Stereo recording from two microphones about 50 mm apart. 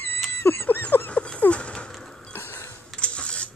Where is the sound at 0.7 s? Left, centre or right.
Left.